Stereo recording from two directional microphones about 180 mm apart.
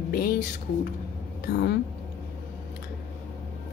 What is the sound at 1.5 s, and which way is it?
Speech, 60° left (ahead or behind).